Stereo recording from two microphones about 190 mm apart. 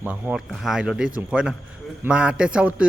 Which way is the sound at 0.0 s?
5° right (ahead or behind).